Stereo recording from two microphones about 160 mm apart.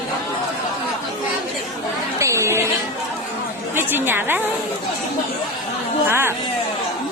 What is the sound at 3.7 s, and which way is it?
Speech, 15° right (ahead or behind).